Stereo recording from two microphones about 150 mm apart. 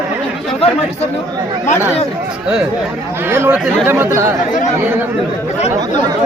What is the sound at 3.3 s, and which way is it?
Speech, 15° right (ahead or behind).